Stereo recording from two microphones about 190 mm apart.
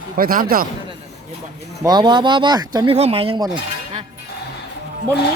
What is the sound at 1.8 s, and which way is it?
Speech, 20° right (ahead or behind).